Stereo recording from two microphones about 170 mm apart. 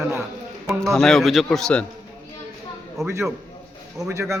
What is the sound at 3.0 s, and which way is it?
A man's voice, 20° right (ahead or behind).